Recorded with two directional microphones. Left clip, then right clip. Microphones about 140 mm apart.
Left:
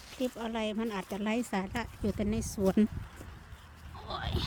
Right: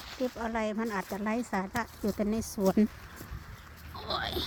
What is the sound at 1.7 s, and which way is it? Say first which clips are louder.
Speech: right 3 dB; 25° left (ahead or behind).